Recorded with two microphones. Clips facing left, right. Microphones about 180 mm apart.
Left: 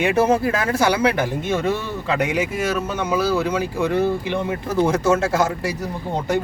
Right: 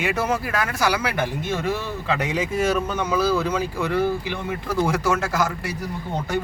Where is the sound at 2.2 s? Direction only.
10° left (ahead or behind).